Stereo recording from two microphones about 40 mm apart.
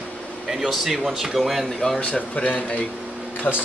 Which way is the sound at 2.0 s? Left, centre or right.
Left.